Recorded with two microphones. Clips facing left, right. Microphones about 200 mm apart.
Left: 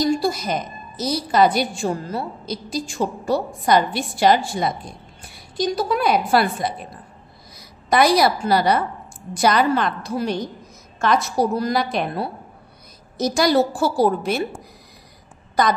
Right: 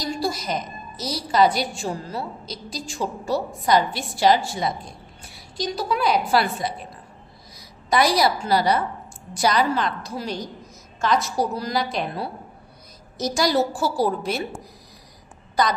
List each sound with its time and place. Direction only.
0.1 s a woman's voice: 55° left (ahead or behind)
7.9 s a woman's voice: 55° left (ahead or behind)